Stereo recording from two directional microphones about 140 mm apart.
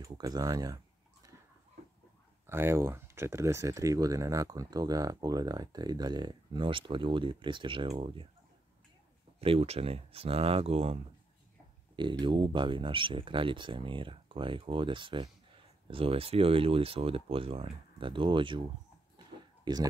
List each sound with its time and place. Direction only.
0.0 s speech: 25° right (ahead or behind)
2.4 s speech: 15° right (ahead or behind); by 8.3 s 40° right (ahead or behind)
9.4 s speech: 45° right (ahead or behind)
11.9 s speech: 35° right (ahead or behind)
19.1 s a sound: 30° right (ahead or behind)